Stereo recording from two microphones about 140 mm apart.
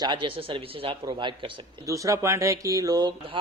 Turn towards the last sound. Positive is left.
turn(degrees=-35)  # may be behind; listen again after turning